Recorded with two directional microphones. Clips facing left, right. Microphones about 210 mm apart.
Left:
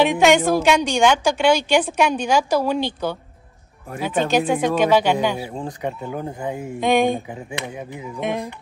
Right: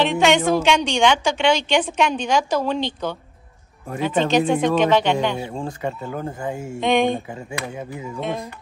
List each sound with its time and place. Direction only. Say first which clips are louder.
0.0 s a woman's voice: left 2 dB; 10° left (ahead or behind)
6.8 s speech: left 1 dB; 5° left (ahead or behind)
7.5 s a woman's voice: right 1 dB; 20° left (ahead or behind)